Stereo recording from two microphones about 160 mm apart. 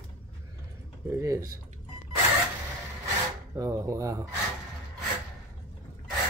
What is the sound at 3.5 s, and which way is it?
Speech, 20° right (ahead or behind).